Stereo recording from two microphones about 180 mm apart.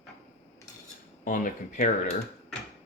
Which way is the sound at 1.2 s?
50° left (ahead or behind).